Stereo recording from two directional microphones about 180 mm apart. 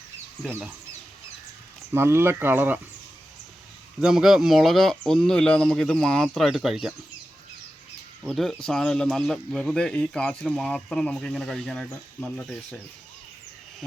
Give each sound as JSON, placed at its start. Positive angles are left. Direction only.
{"t": 1.9, "sound": "speech", "side_deg": -15}
{"t": 4.0, "sound": "speech", "side_deg": 0}
{"t": 8.2, "sound": "speech", "side_deg": -5}